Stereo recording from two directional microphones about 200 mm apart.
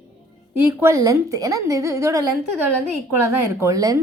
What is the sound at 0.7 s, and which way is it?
A woman's voice, 15° right (ahead or behind).